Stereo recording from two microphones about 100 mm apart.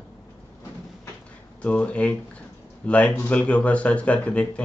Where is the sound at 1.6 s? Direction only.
10° left (ahead or behind).